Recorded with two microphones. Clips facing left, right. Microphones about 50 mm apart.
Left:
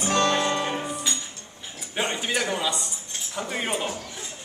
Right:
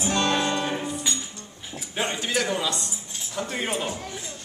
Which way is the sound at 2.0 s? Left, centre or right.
Centre.